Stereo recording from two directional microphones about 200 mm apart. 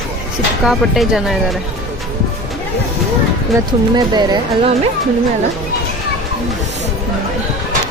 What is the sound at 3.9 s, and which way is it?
Speech, 20° right (ahead or behind).